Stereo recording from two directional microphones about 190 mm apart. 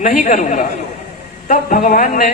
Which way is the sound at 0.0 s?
45° left (ahead or behind).